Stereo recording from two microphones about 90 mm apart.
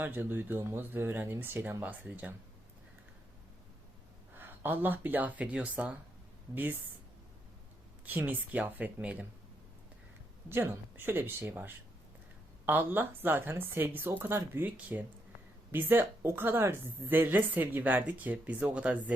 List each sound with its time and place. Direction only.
0.0 s a woman's voice: 20° right (ahead or behind)
4.4 s a woman's voice: 20° right (ahead or behind)
8.0 s a woman's voice: 20° right (ahead or behind)
10.5 s a woman's voice: 25° right (ahead or behind)